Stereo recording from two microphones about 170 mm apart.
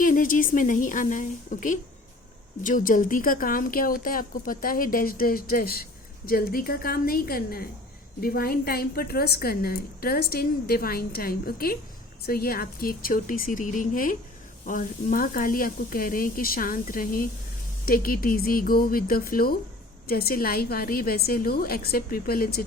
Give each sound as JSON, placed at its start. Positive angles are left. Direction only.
{"t": 0.0, "sound": "a woman's voice", "side_deg": 55}